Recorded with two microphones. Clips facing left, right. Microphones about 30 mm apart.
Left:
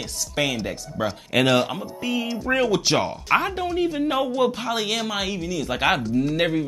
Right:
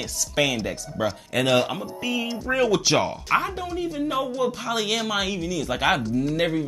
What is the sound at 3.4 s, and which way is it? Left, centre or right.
Speech, left.